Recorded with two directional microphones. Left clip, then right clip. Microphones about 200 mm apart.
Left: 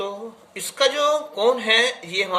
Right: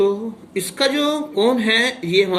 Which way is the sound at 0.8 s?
10° right (ahead or behind).